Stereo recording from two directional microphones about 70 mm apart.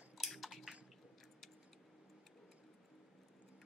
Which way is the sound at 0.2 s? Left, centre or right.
Centre.